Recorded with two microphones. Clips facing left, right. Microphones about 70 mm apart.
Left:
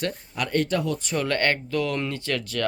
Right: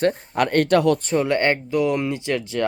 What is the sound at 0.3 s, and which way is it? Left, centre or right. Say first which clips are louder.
Speech: right 6 dB; right.